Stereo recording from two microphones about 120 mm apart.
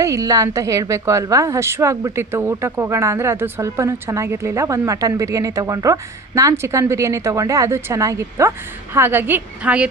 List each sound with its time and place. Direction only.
0.0 s a woman's voice: 30° right (ahead or behind); by 9.9 s 10° right (ahead or behind)